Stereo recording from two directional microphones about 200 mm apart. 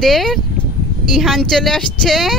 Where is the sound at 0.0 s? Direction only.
Centre (ahead or behind).